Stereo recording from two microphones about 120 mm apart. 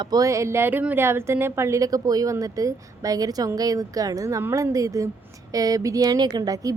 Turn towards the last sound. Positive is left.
turn(degrees=-30)  # may be behind; listen again after turning